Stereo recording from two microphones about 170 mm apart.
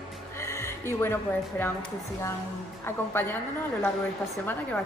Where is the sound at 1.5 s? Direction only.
15° left (ahead or behind).